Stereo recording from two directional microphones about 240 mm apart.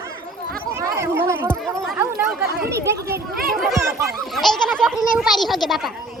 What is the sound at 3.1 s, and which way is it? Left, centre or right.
Speech, right.